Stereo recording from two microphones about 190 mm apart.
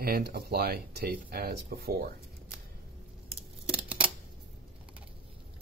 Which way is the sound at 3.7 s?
5° right (ahead or behind).